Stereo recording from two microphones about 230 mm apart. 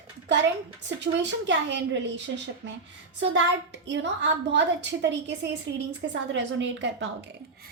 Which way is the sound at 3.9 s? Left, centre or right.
Right.